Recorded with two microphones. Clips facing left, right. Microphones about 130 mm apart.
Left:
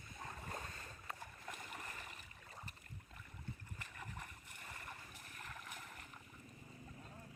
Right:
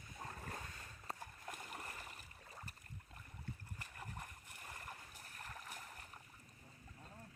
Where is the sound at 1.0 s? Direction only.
40° right (ahead or behind).